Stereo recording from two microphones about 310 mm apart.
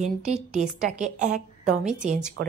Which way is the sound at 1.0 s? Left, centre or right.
Right.